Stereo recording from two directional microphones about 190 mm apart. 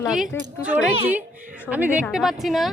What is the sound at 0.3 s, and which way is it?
Speech, 15° left (ahead or behind).